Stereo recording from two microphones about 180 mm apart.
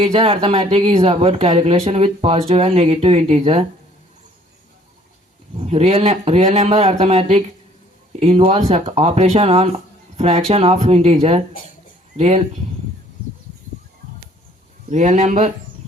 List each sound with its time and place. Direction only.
0.1 s speech: 30° right (ahead or behind)
5.5 s speech: 35° right (ahead or behind)
14.8 s speech: 40° right (ahead or behind)